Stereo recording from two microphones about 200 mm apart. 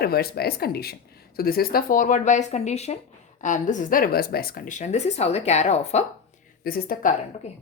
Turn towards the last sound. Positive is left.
turn(degrees=35)  # may be behind; listen again after turning